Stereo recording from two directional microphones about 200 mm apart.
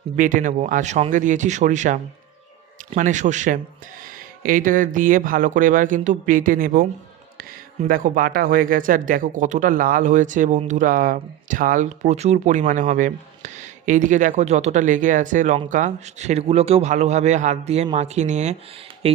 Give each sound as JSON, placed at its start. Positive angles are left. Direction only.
{"t": 0.2, "sound": "speech", "side_deg": -40}